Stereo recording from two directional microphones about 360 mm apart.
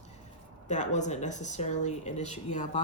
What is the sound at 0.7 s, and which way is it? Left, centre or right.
Speech, centre.